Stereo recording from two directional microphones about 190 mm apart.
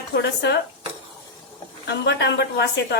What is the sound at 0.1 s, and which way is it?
Speech, 65° left (ahead or behind).